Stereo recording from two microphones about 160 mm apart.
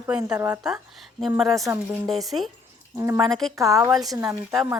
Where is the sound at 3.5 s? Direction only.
20° right (ahead or behind).